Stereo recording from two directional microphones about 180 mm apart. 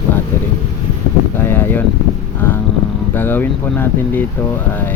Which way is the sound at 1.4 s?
10° left (ahead or behind).